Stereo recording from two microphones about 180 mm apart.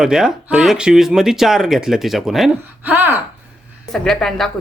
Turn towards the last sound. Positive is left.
turn(degrees=0)  # may be behind; listen again after turning